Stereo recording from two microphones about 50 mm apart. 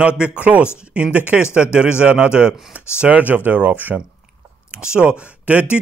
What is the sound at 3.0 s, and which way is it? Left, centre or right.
Speech, right.